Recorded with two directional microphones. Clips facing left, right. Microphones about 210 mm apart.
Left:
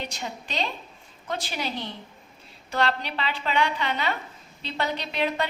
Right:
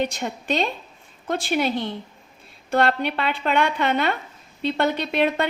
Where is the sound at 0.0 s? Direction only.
55° right (ahead or behind).